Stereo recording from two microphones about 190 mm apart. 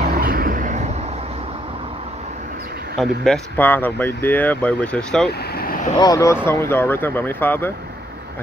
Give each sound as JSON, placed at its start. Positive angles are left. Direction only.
{"t": 0.2, "sound": "vehicle", "side_deg": -50}
{"t": 3.0, "sound": "speech", "side_deg": 5}
{"t": 5.6, "sound": "vehicle", "side_deg": 50}
{"t": 5.9, "sound": "speech", "side_deg": 20}